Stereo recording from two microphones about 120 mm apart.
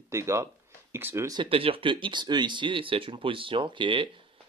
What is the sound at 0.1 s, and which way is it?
Speech, 25° right (ahead or behind).